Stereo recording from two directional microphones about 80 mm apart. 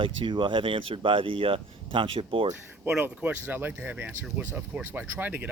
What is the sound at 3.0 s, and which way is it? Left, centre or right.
Speech, right.